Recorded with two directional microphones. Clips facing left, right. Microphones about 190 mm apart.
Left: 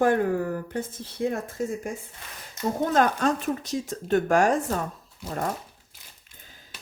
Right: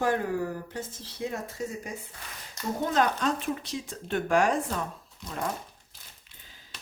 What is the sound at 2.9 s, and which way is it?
Speech, 50° left (ahead or behind).